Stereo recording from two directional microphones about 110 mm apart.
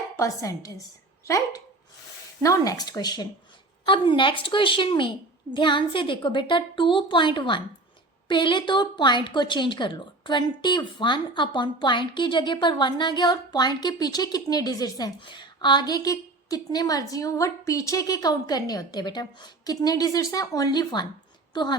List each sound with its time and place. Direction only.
0.2 s a woman's voice: 30° left (ahead or behind)
2.4 s a woman's voice: 30° left (ahead or behind)
3.8 s a woman's voice: 50° left (ahead or behind)